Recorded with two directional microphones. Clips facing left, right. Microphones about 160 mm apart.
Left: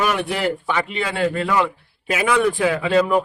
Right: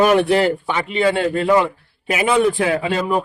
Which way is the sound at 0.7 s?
20° right (ahead or behind).